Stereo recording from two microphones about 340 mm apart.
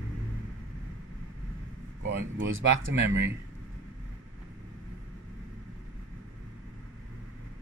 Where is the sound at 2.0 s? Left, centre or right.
Right.